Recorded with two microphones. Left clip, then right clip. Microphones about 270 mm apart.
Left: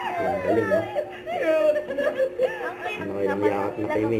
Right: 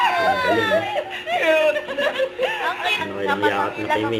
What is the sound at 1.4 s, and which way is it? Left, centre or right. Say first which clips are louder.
Speech: right 3 dB; centre.